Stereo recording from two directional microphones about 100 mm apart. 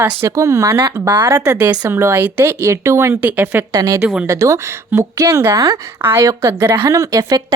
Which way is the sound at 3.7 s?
35° right (ahead or behind).